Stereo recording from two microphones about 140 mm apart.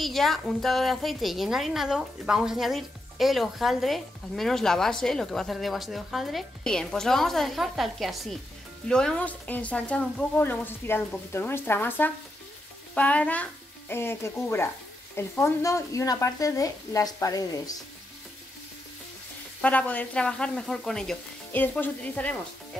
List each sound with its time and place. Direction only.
0.0 s a woman's voice: centre (ahead or behind); by 17.7 s 25° left (ahead or behind)
19.6 s speech: 10° left (ahead or behind)